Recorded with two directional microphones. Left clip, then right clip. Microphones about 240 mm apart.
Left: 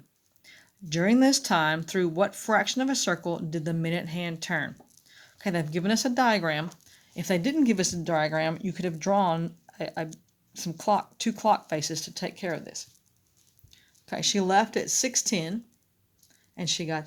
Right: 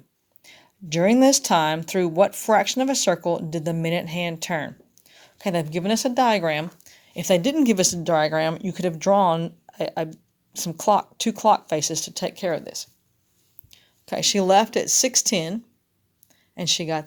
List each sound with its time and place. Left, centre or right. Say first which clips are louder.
0.4 s speech: right 4 dB; centre